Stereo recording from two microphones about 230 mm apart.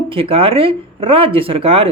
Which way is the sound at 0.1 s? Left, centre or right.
Right.